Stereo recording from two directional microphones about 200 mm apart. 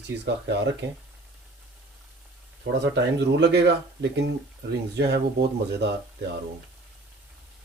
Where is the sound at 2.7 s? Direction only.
60° right (ahead or behind).